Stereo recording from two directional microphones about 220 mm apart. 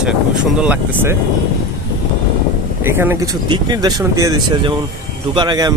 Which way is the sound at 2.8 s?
10° right (ahead or behind).